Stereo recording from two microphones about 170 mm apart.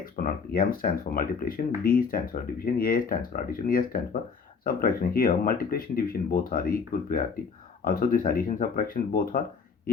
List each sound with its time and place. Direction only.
0.0 s speech: 55° left (ahead or behind)